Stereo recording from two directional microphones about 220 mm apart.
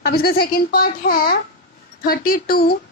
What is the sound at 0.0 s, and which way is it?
Speech, 45° left (ahead or behind).